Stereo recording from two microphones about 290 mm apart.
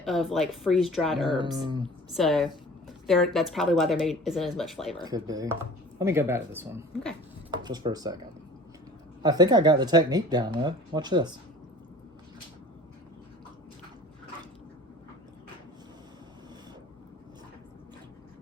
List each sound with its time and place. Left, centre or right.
0.0 s speech: centre
1.3 s speech: centre
2.1 s speech: centre
5.0 s speech: centre
9.2 s speech: centre